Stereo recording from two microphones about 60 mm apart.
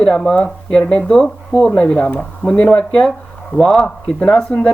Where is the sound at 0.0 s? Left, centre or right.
Centre.